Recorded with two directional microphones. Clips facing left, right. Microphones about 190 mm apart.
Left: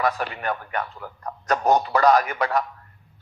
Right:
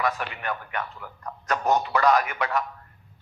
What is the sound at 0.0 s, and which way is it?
A man's voice, 35° left (ahead or behind).